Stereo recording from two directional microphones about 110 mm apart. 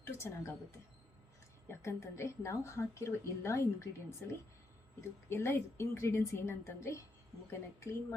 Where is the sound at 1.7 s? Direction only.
25° left (ahead or behind).